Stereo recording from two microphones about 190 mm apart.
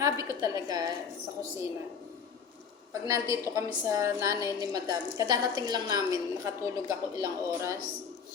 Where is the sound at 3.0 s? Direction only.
15° right (ahead or behind).